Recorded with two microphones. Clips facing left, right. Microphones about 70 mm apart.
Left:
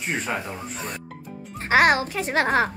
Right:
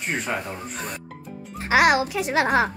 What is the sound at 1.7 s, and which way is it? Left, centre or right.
Speech, left.